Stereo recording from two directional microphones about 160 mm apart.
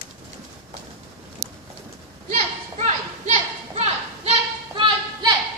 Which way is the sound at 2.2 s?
50° right (ahead or behind).